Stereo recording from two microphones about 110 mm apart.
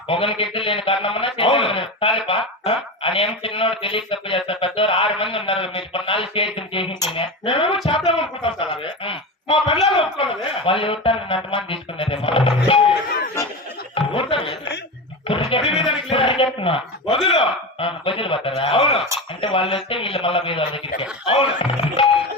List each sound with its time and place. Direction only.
0.1 s a man's voice: 55° left (ahead or behind)
7.9 s a sound: 55° left (ahead or behind)
9.8 s music: 55° left (ahead or behind)
13.9 s snicker: 55° left (ahead or behind)
15.3 s a sound: 55° left (ahead or behind)
19.4 s a man's voice: 55° left (ahead or behind)